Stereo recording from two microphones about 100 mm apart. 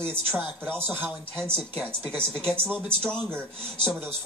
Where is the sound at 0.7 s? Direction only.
20° right (ahead or behind).